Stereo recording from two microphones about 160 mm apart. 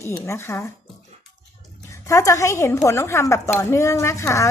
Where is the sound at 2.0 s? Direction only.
20° left (ahead or behind).